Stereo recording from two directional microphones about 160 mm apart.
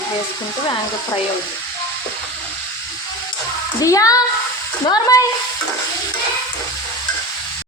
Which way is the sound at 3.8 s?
20° left (ahead or behind).